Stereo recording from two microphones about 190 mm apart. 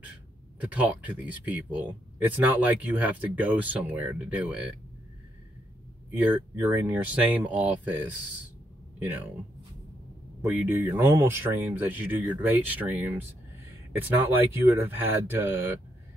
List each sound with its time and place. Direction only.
0.6 s speech: 10° right (ahead or behind)
6.3 s speech: 10° right (ahead or behind)
10.4 s speech: 10° right (ahead or behind)